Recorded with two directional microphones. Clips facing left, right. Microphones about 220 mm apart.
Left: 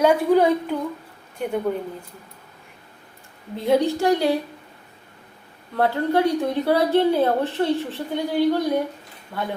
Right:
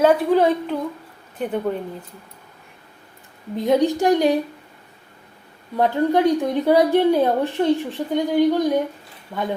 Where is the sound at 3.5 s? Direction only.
15° right (ahead or behind).